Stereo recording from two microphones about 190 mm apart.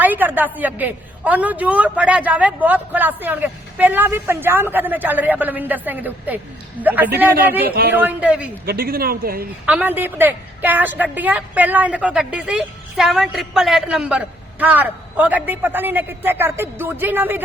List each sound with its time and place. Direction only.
0.0 s a woman's voice: 10° right (ahead or behind)
7.6 s a man's voice: 55° right (ahead or behind)
7.9 s a woman's voice: 10° right (ahead or behind)
8.6 s a man's voice: 50° right (ahead or behind)
9.6 s a woman's voice: 10° right (ahead or behind)